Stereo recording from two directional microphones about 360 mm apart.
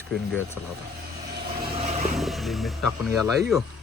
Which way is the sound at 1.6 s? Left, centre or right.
Centre.